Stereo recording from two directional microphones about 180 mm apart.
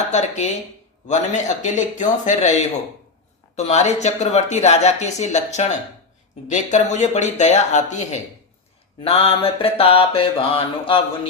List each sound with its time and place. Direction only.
0.1 s speech: 40° left (ahead or behind)